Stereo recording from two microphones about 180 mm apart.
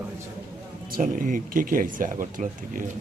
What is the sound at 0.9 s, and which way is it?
Speech, 50° right (ahead or behind).